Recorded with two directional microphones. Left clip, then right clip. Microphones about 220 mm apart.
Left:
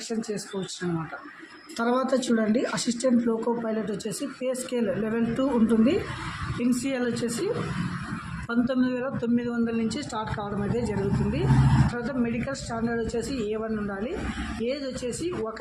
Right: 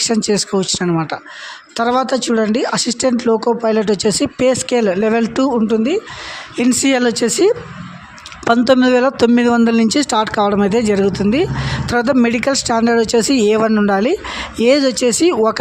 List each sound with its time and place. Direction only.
0.1 s a man's voice: 45° right (ahead or behind)
1.7 s a man's voice: 40° right (ahead or behind)